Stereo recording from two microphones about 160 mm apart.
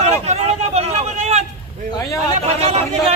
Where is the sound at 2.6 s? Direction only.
40° right (ahead or behind).